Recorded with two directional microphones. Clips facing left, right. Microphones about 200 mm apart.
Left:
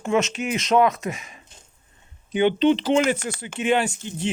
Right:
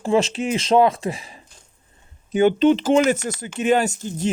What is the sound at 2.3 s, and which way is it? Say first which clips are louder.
Speech: right 3 dB; 45° right (ahead or behind).